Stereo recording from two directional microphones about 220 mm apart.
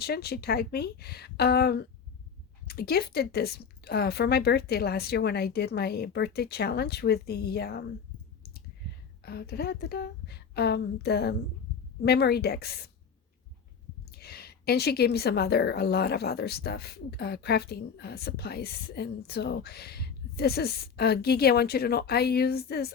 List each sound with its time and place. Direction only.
0.0 s a woman's voice: 45° left (ahead or behind)
9.2 s a woman's voice: 45° left (ahead or behind)
14.1 s a woman's voice: 45° left (ahead or behind)